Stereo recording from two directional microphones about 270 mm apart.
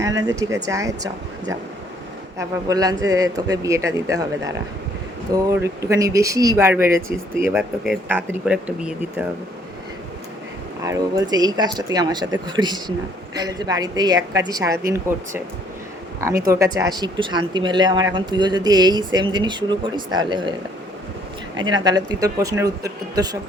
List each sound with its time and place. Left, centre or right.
0.3 s speech: centre
10.8 s speech: centre
16.5 s speech: centre
21.5 s speech: centre